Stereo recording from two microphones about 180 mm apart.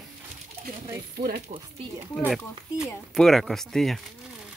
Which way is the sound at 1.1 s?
55° right (ahead or behind).